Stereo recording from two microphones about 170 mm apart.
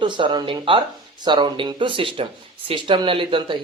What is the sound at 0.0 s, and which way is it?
Speech, 30° right (ahead or behind).